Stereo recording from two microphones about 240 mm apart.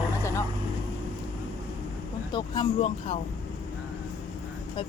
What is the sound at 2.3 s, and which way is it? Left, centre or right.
Speech, centre.